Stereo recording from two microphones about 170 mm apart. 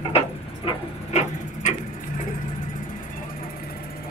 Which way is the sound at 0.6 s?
40° left (ahead or behind).